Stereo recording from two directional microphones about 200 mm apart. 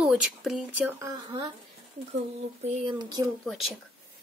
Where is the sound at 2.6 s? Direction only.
25° right (ahead or behind).